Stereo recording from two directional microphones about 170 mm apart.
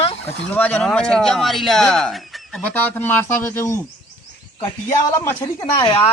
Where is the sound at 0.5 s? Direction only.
10° left (ahead or behind).